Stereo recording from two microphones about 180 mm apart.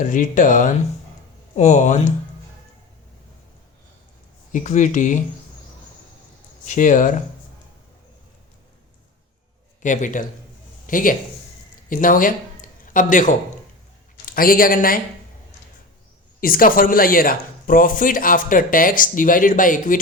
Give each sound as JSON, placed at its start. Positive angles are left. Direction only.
{"t": 0.0, "sound": "speech", "side_deg": 45}
{"t": 4.5, "sound": "speech", "side_deg": 45}
{"t": 6.7, "sound": "speech", "side_deg": 45}
{"t": 9.8, "sound": "speech", "side_deg": 45}
{"t": 16.4, "sound": "speech", "side_deg": 50}